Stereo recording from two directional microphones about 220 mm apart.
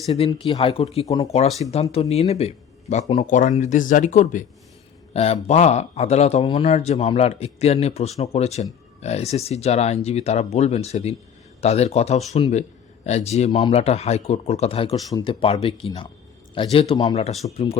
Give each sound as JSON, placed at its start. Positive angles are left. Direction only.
{"t": 0.1, "sound": "speech", "side_deg": 25}
{"t": 1.7, "sound": "speech", "side_deg": 25}